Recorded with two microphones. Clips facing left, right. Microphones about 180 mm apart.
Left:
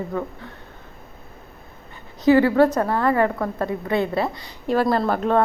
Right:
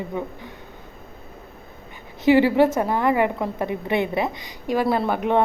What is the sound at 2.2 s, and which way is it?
A woman's voice, 25° right (ahead or behind).